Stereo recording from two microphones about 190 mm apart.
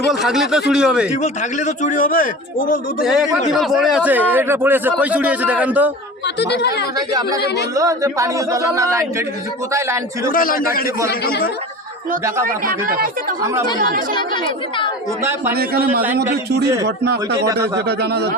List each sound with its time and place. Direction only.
0.0 s speech: centre (ahead or behind)
1.2 s a man's voice: 40° left (ahead or behind)
3.5 s a man's voice: centre (ahead or behind)
6.2 s speech: 60° left (ahead or behind)
6.9 s speech: 20° right (ahead or behind)
7.4 s speech: 60° left (ahead or behind)
7.8 s a man's voice: 15° right (ahead or behind)
10.3 s a man's voice: 50° left (ahead or behind)
12.5 s speech: 50° right (ahead or behind)
13.4 s a man's voice: 15° right (ahead or behind)
13.7 s speech: 50° right (ahead or behind)
14.2 s speech: 25° left (ahead or behind)
15.2 s a man's voice: 15° right (ahead or behind)
15.5 s a man's voice: 55° right (ahead or behind)